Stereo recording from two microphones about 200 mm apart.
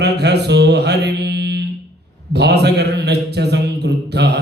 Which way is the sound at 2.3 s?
55° right (ahead or behind).